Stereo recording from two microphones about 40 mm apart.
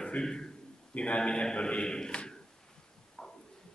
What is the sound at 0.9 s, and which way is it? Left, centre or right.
A man's voice, left.